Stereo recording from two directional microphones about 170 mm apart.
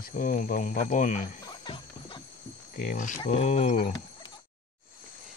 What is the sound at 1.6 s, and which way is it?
Music, 30° left (ahead or behind).